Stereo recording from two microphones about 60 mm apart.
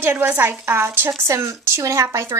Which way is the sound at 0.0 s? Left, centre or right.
Right.